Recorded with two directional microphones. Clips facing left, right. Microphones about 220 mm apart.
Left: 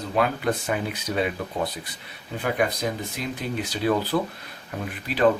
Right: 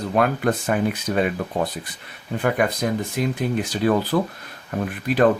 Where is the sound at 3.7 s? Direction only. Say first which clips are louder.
Right 2 dB; 50° right (ahead or behind).